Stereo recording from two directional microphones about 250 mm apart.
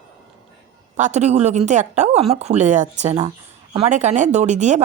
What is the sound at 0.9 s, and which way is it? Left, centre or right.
Speech, right.